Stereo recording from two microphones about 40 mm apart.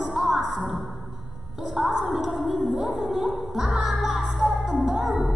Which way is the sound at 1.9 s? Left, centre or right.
Right.